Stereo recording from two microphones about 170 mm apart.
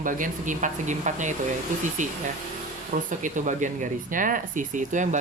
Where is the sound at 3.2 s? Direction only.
50° right (ahead or behind).